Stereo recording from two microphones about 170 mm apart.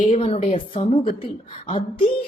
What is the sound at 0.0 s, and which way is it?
A woman's voice, 40° left (ahead or behind).